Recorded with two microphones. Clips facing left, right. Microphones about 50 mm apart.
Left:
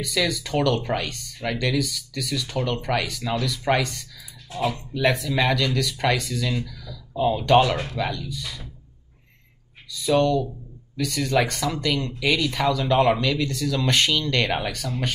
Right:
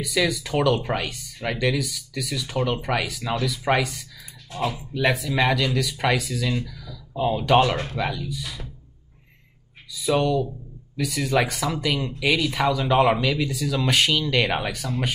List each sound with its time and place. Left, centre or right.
0.0 s speech: centre
7.7 s speech: right
8.1 s speech: centre
9.8 s speech: centre